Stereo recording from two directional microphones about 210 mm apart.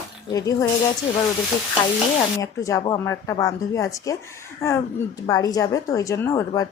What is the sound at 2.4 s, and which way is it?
A woman's voice, 15° left (ahead or behind).